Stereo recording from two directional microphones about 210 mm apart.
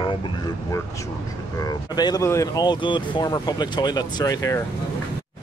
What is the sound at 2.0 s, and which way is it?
Speech, 20° left (ahead or behind).